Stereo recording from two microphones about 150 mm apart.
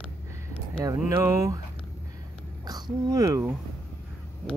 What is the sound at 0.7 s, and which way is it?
Speech, 20° right (ahead or behind).